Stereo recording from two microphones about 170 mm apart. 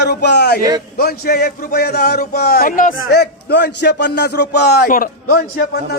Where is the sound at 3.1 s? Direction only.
75° left (ahead or behind).